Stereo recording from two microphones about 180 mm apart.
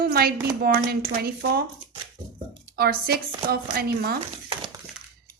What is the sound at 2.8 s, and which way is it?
A woman's voice, 60° right (ahead or behind).